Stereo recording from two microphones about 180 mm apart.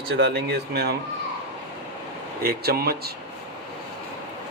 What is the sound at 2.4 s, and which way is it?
Speech, 60° right (ahead or behind).